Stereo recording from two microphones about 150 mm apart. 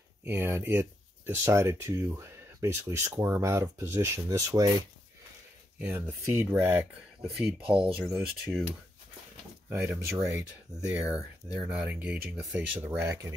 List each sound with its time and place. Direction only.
0.2 s speech: 15° right (ahead or behind)
5.8 s speech: 15° right (ahead or behind)
9.7 s speech: 10° right (ahead or behind)
13.0 s speech: 20° right (ahead or behind)